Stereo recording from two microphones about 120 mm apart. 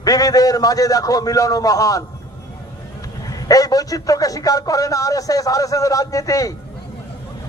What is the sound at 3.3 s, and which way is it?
A man's voice, 30° left (ahead or behind).